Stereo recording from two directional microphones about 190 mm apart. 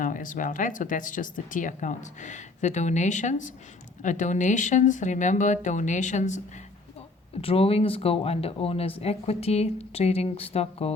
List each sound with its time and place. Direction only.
0.0 s speech: 45° left (ahead or behind)
7.4 s speech: 30° left (ahead or behind)